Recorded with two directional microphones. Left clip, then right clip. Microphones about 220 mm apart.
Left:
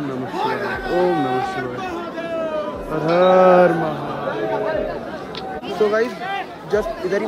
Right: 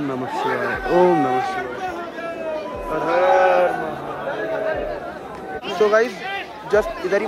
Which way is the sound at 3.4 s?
45° left (ahead or behind).